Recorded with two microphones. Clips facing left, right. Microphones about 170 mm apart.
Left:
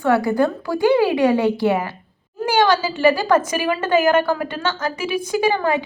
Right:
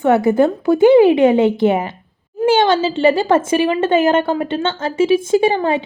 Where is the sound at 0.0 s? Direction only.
20° right (ahead or behind).